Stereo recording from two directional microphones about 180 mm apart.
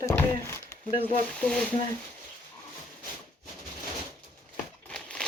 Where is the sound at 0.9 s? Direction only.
30° left (ahead or behind).